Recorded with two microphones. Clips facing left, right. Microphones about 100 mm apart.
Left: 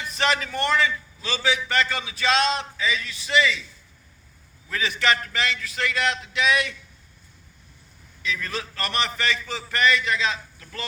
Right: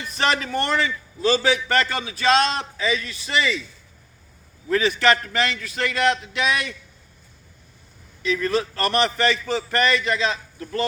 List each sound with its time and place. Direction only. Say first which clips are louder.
0.2 s a man's voice: right 2 dB; 40° right (ahead or behind)
4.7 s a man's voice: right 5 dB; 40° right (ahead or behind)
8.2 s a man's voice: right 8 dB; 40° right (ahead or behind)